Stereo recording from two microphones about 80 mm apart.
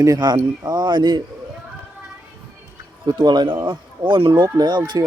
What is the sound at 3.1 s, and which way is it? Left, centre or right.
Speech, right.